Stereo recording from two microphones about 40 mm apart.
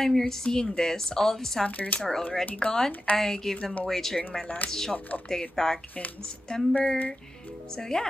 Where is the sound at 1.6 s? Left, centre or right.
Left.